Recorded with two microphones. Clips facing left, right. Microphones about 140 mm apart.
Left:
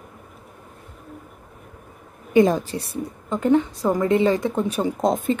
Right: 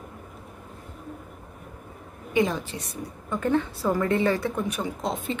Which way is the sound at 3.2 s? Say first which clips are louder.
Left 6 dB; 20° left (ahead or behind).